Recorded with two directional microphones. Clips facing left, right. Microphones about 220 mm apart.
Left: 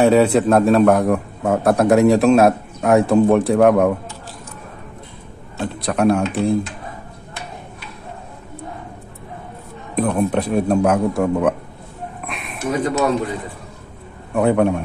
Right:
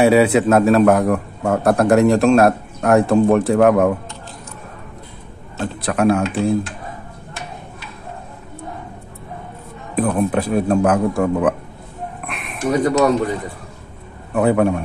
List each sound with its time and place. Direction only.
0.0 s a man's voice: 5° right (ahead or behind)
5.6 s a man's voice: centre (ahead or behind)
9.9 s a man's voice: centre (ahead or behind)
12.3 s a sound: centre (ahead or behind)
12.7 s speech: 40° right (ahead or behind)
14.3 s a man's voice: centre (ahead or behind)